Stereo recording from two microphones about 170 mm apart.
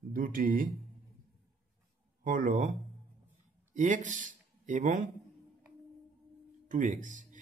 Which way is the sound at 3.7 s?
50° right (ahead or behind).